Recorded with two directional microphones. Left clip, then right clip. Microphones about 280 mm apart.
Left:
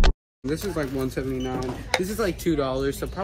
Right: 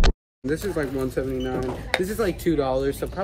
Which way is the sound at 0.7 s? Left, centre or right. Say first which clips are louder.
Right 2 dB; centre.